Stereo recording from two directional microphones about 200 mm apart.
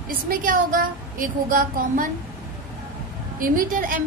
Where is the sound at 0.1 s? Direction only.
45° right (ahead or behind).